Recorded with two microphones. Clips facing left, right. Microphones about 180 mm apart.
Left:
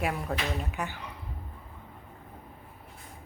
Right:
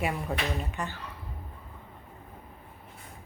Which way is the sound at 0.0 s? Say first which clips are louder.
Even; centre (ahead or behind).